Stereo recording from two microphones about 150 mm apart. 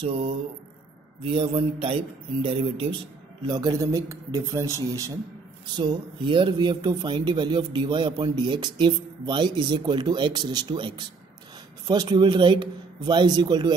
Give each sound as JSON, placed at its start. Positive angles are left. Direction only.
{"t": 0.0, "sound": "speech", "side_deg": -35}
{"t": 3.4, "sound": "speech", "side_deg": -25}
{"t": 5.8, "sound": "speech", "side_deg": -30}